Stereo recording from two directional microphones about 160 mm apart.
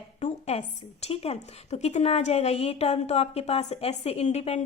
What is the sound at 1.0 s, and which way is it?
A woman's voice, 40° left (ahead or behind).